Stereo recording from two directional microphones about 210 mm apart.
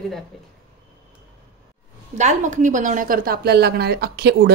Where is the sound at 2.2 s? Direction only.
35° right (ahead or behind).